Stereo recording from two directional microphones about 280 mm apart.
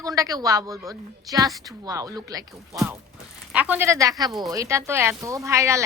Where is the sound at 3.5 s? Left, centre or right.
Centre.